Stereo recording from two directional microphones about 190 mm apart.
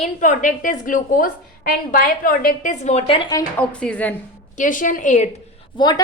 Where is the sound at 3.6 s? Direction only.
5° left (ahead or behind).